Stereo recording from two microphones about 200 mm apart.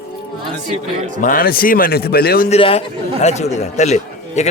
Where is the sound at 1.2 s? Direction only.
45° left (ahead or behind).